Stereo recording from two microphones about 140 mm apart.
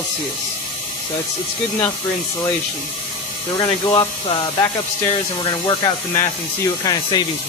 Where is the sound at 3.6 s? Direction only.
35° left (ahead or behind).